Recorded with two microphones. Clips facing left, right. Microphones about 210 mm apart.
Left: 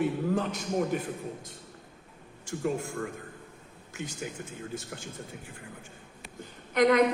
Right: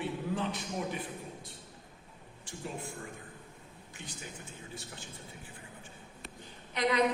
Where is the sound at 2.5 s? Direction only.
45° left (ahead or behind).